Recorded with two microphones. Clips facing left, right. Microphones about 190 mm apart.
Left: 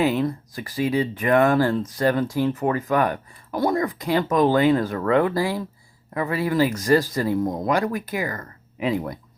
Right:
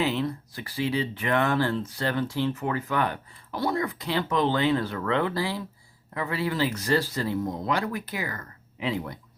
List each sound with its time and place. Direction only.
0.2 s speech: 45° left (ahead or behind)